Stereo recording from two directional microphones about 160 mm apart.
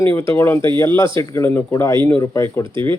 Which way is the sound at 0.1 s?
15° left (ahead or behind).